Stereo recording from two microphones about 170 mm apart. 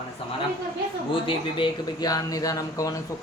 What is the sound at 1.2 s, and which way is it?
Speech, 25° left (ahead or behind).